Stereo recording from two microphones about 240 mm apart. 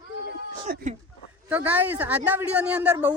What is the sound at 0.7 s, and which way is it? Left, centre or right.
Speech, right.